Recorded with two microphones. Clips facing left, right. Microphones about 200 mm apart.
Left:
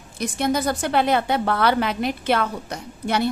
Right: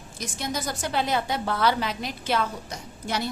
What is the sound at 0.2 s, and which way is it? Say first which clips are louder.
A woman's voice: left 9 dB; 60° left (ahead or behind).